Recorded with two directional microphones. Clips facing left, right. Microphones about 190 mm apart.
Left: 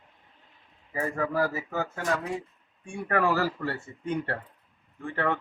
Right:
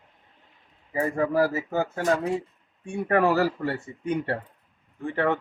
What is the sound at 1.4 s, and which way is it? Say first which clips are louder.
Speech: right 5 dB; 30° right (ahead or behind).